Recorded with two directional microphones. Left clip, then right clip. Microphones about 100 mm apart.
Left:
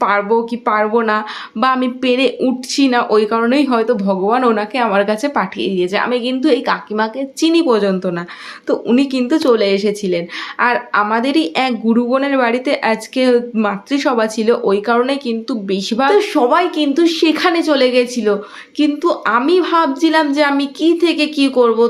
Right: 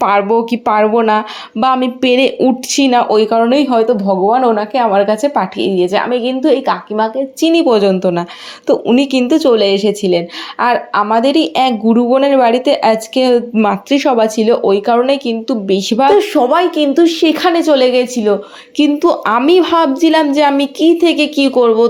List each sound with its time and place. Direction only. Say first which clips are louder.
0.0 s speech: right 3 dB; 45° right (ahead or behind)
0.9 s a woman's voice: right 3 dB; 35° right (ahead or behind); by 6.1 s 15° right (ahead or behind)
6.1 s speech: right 3 dB; 5° right (ahead or behind)
7.7 s a woman's voice: right 4 dB; 30° right (ahead or behind)
18.8 s a woman's voice: right 4 dB; 55° right (ahead or behind); by 21.8 s 30° right (ahead or behind)